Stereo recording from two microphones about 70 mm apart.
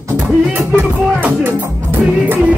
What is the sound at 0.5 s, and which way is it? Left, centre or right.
Music, right.